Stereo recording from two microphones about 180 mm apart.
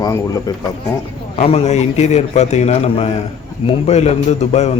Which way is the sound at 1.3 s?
35° left (ahead or behind).